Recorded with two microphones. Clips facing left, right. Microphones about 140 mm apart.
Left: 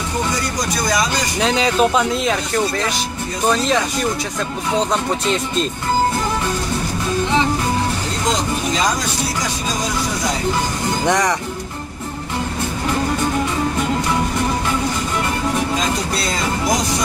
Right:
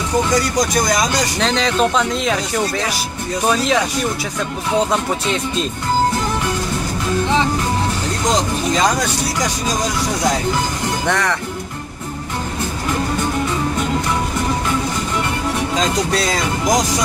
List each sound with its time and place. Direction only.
1.4 s speech: 5° left (ahead or behind)
3.4 s speech: 5° right (ahead or behind)
11.1 s speech: 15° left (ahead or behind)